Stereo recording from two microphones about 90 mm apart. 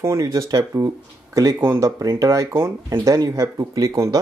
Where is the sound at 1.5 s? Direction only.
25° right (ahead or behind).